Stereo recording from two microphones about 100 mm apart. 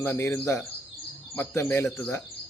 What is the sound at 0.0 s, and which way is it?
Speech, 25° left (ahead or behind).